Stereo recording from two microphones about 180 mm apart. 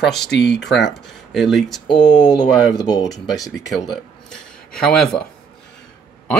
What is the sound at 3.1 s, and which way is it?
Speech, centre (ahead or behind).